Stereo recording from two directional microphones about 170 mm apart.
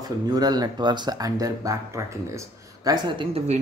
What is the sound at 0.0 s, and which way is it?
Speech, 20° right (ahead or behind).